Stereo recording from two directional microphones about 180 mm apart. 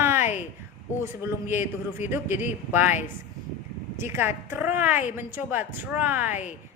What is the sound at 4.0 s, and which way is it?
A woman's voice, 15° right (ahead or behind).